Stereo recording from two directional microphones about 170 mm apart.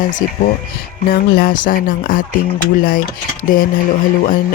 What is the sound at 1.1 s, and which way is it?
Speech, 60° left (ahead or behind).